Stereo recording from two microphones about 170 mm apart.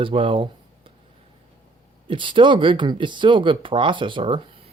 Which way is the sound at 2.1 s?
30° right (ahead or behind).